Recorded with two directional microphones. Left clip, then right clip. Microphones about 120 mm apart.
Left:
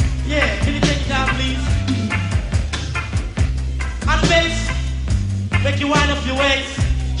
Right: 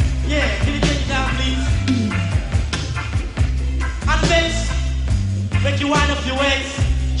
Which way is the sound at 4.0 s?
35° right (ahead or behind).